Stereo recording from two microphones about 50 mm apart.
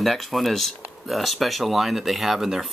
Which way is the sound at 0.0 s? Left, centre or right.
Centre.